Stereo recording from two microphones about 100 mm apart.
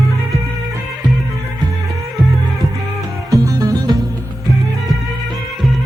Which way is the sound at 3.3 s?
35° right (ahead or behind).